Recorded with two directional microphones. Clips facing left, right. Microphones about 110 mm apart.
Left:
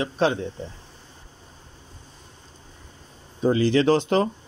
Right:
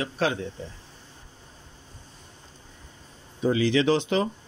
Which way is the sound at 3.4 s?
35° left (ahead or behind).